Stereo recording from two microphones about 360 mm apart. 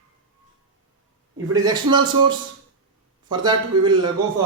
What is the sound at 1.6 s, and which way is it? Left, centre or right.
A man's voice, centre.